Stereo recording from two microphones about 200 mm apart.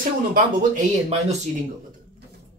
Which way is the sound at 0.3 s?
40° right (ahead or behind).